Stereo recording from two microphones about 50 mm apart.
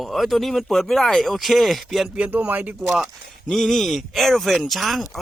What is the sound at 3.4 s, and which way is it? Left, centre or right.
Speech, centre.